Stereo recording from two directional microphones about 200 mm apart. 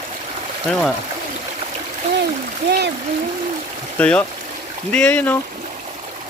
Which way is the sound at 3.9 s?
5° left (ahead or behind).